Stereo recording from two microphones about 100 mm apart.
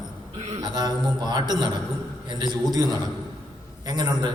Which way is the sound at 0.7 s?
40° right (ahead or behind).